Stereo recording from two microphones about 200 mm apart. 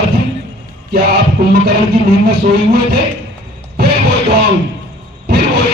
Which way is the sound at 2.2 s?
55° right (ahead or behind).